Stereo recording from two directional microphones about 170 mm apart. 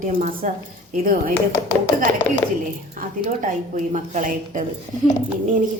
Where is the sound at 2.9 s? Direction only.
50° right (ahead or behind).